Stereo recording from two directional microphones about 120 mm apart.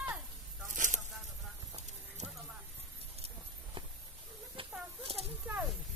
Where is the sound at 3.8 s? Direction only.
45° right (ahead or behind).